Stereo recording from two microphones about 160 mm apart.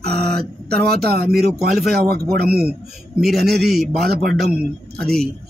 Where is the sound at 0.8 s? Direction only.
75° right (ahead or behind).